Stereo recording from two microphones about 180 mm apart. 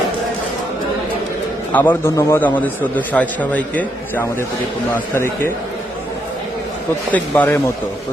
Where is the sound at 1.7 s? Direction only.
10° left (ahead or behind).